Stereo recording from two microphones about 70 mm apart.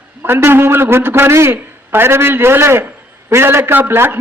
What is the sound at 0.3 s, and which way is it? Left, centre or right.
A man's voice, right.